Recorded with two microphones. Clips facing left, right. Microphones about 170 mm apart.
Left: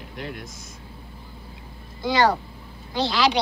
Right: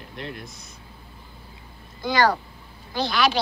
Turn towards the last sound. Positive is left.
turn(degrees=20)  # may be behind; listen again after turning